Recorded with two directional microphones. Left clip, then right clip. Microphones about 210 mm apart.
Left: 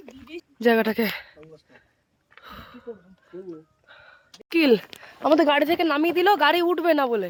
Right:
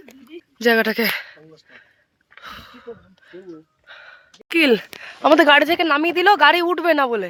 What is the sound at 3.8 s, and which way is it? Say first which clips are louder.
Gasp: right 8 dB; centre (ahead or behind).